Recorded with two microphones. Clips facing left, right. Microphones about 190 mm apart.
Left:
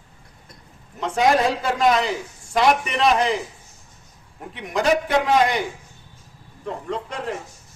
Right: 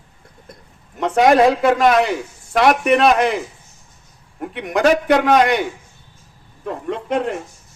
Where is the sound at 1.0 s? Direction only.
65° right (ahead or behind).